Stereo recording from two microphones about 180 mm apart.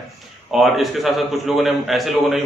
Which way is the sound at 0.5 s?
Centre (ahead or behind).